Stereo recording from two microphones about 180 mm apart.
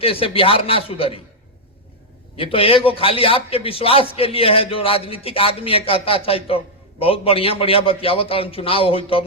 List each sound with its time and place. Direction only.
0.0 s a man's voice: 30° left (ahead or behind)
2.3 s a man's voice: 30° left (ahead or behind)